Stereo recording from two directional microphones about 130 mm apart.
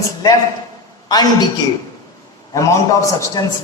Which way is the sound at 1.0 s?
30° left (ahead or behind).